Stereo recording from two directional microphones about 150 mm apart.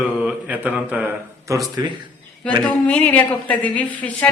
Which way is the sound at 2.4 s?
5° left (ahead or behind).